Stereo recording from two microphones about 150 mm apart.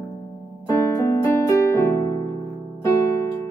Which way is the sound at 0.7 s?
20° left (ahead or behind).